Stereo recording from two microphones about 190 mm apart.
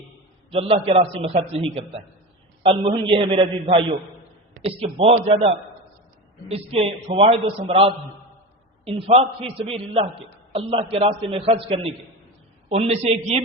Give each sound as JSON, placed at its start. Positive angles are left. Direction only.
{"t": 0.5, "sound": "a man's voice", "side_deg": -30}